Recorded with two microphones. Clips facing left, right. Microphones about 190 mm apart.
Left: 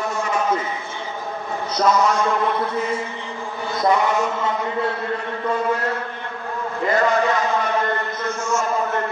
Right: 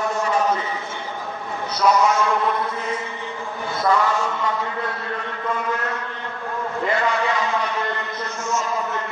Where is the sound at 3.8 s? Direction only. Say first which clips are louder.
Left 1 dB; 15° left (ahead or behind).